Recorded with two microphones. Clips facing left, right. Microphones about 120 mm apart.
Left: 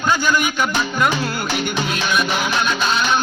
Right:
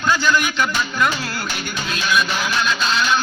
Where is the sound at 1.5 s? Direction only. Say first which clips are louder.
Left 5 dB; 55° left (ahead or behind).